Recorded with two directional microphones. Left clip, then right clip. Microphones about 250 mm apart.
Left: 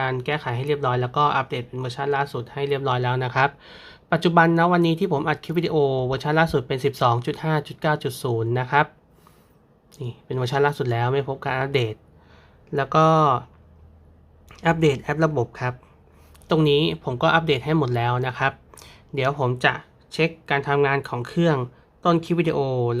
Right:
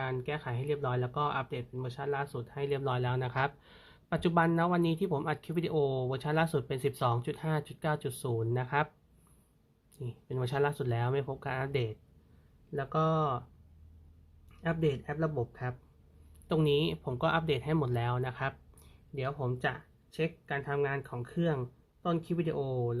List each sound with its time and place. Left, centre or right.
0.0 s speech: centre
9.9 s speech: centre
14.5 s speech: centre